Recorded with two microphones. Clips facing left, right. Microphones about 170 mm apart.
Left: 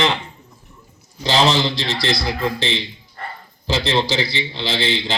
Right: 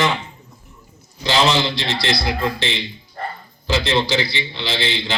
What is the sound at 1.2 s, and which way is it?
A man's voice, 35° left (ahead or behind).